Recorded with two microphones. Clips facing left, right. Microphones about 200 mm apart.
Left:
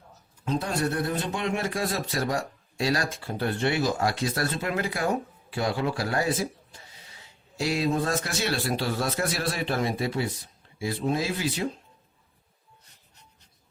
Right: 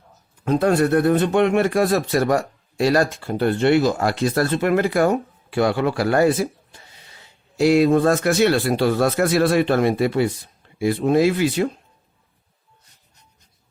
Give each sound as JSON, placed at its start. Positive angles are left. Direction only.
{"t": 0.4, "sound": "speech", "side_deg": -65}